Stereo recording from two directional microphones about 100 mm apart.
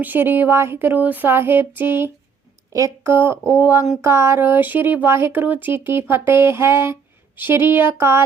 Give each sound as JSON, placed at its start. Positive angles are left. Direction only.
{"t": 0.0, "sound": "speech", "side_deg": -20}